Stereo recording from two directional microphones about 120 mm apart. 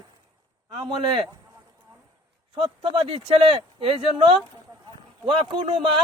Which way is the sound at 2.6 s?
50° right (ahead or behind).